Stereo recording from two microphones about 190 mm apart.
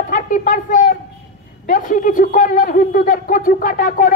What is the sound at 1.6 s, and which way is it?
Speech, 45° left (ahead or behind).